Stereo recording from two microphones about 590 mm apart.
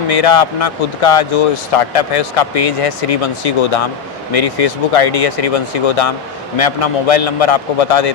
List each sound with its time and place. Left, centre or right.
0.1 s speech: left